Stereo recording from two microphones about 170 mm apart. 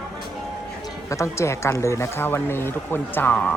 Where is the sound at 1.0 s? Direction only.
15° left (ahead or behind).